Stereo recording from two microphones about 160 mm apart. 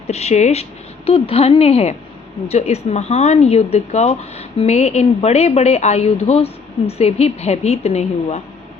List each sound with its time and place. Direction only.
0.1 s speech: 45° left (ahead or behind)